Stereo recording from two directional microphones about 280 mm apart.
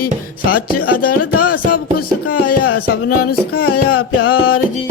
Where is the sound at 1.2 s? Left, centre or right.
Left.